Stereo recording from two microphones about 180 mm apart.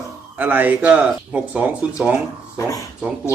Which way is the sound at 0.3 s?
10° right (ahead or behind).